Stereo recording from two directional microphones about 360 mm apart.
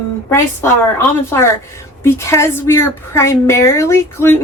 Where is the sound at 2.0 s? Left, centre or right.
Centre.